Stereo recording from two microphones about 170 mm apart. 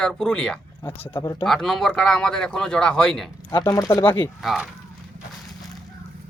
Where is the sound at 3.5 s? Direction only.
20° left (ahead or behind).